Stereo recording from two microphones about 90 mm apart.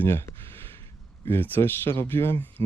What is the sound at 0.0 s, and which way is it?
Speech, 25° left (ahead or behind).